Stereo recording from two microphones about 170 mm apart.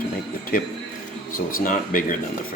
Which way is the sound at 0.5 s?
60° left (ahead or behind).